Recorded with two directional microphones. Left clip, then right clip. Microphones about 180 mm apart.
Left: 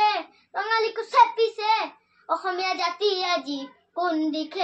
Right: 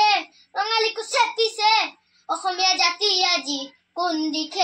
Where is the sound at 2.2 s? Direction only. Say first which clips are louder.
Right 4 dB; 15° left (ahead or behind).